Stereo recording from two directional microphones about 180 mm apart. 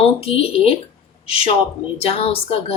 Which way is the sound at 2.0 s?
35° left (ahead or behind).